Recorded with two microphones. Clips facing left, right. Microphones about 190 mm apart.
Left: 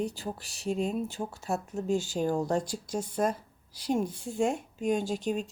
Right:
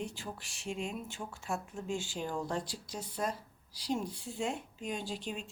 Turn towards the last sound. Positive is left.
turn(degrees=45)  # may be behind; listen again after turning